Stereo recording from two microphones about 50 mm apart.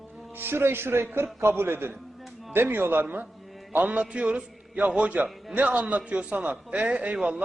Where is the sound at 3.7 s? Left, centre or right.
Right.